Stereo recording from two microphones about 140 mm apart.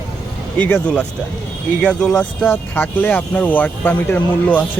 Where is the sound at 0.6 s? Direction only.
10° left (ahead or behind).